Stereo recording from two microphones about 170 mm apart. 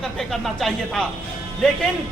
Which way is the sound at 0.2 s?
Centre (ahead or behind).